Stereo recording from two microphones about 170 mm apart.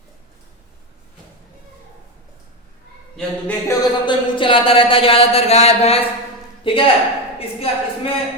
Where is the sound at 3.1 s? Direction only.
10° left (ahead or behind).